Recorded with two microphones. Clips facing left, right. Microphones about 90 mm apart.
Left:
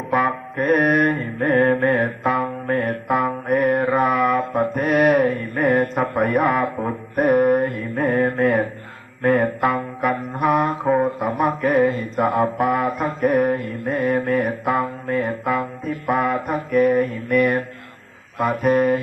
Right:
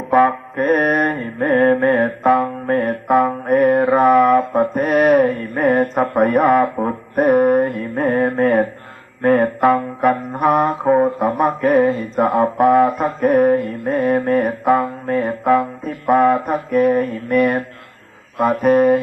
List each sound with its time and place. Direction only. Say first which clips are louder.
0.1 s music: right 7 dB; 30° right (ahead or behind)
4.4 s mantra: right 4 dB; 25° right (ahead or behind)
6.0 s speech: right 4 dB; 35° right (ahead or behind)
9.4 s music: right 5 dB; 35° right (ahead or behind)
18.3 s speech: right 4 dB; 30° right (ahead or behind)